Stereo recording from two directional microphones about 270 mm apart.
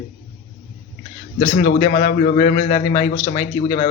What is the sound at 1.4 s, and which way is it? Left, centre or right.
A man's voice, left.